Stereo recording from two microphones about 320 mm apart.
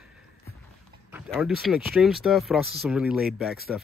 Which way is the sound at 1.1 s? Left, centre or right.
Centre.